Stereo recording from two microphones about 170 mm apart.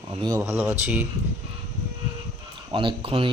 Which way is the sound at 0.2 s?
20° right (ahead or behind).